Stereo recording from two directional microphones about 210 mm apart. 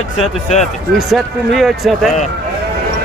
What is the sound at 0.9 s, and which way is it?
Speech, centre (ahead or behind).